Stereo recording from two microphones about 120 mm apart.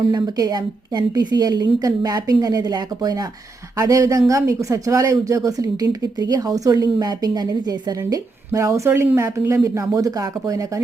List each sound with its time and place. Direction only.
0.0 s a woman's voice: 35° right (ahead or behind)